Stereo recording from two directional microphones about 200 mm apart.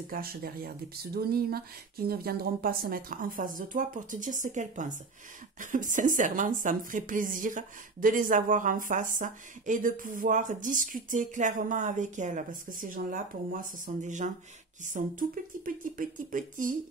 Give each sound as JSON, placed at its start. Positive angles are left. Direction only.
{"t": 0.1, "sound": "a woman's voice", "side_deg": -50}